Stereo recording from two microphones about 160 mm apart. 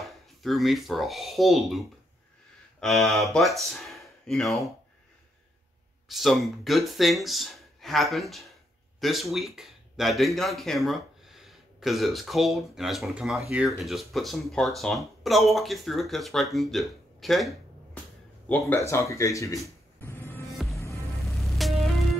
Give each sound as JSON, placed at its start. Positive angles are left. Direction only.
{"t": 0.0, "sound": "speech", "side_deg": 0}
{"t": 6.0, "sound": "speech", "side_deg": 0}
{"t": 18.5, "sound": "speech", "side_deg": 15}
{"t": 20.0, "sound": "music", "side_deg": 15}
{"t": 20.5, "sound": "music", "side_deg": 0}